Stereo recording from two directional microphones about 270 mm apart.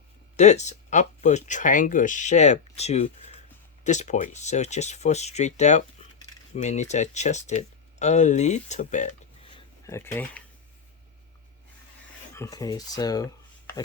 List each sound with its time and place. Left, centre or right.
0.3 s speech: left
9.8 s speech: centre
12.3 s speech: centre